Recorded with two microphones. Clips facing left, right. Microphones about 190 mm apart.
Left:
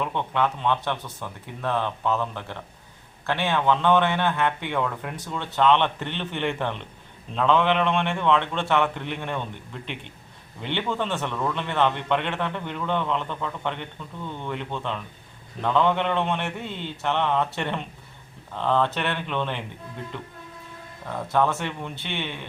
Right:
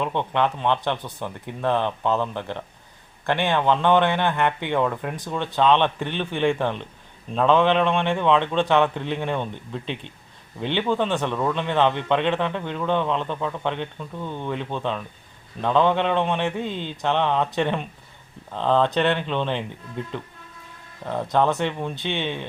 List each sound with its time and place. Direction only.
0.0 s speech: 20° right (ahead or behind)
10.6 s speech: 15° right (ahead or behind)
21.1 s speech: 20° right (ahead or behind)